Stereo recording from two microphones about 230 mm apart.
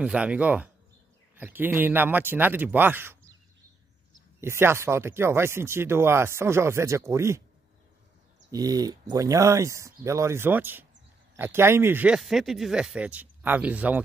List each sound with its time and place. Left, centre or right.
0.0 s speech: centre
4.4 s speech: centre
8.5 s speech: centre